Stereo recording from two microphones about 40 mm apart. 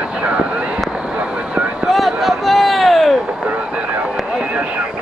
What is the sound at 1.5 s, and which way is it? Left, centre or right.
Vehicle, right.